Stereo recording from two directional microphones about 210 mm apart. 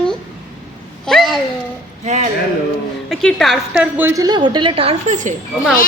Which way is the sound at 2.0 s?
35° right (ahead or behind).